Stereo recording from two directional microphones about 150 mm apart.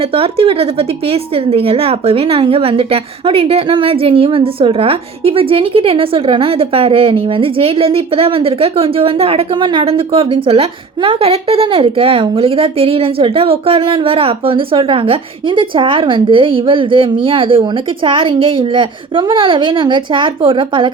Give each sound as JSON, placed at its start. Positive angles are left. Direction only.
{"t": 0.0, "sound": "a woman's voice", "side_deg": -40}